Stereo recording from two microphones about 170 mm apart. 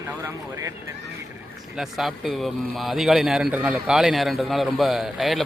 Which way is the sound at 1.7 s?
Centre (ahead or behind).